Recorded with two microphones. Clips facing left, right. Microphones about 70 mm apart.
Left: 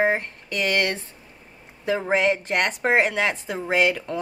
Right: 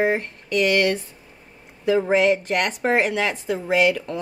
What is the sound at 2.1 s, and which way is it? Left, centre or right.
A woman's voice, left.